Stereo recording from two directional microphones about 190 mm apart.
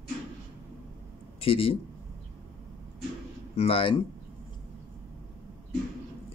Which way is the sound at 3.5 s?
30° left (ahead or behind).